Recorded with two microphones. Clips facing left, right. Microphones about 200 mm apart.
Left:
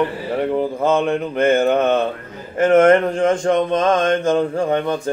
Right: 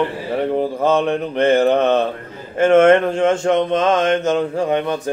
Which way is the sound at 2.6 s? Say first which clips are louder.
Right 1 dB; 25° right (ahead or behind).